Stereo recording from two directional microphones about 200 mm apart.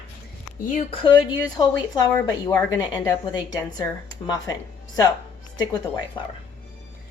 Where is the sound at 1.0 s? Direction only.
25° left (ahead or behind).